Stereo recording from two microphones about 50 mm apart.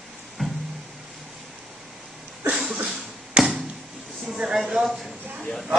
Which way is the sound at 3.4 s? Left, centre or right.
Centre.